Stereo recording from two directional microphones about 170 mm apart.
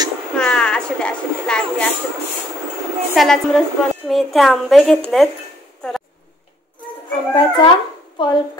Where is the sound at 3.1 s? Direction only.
Centre (ahead or behind).